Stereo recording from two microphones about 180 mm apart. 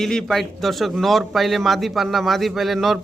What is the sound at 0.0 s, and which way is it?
A man's voice, centre (ahead or behind).